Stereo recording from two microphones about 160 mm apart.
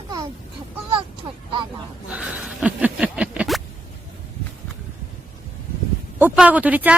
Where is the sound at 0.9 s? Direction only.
30° right (ahead or behind).